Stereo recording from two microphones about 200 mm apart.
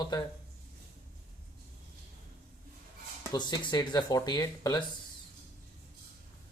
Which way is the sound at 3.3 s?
20° left (ahead or behind).